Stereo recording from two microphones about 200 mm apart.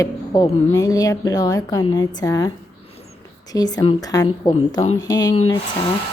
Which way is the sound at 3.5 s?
20° left (ahead or behind).